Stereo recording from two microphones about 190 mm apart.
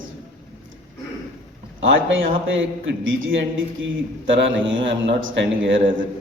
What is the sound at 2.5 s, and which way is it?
A man's voice, 90° right.